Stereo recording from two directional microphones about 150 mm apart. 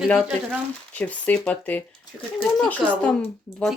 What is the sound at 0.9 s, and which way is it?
Speech, 10° left (ahead or behind).